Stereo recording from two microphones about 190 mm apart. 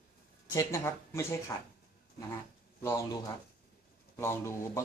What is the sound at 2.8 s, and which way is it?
Speech, 15° left (ahead or behind).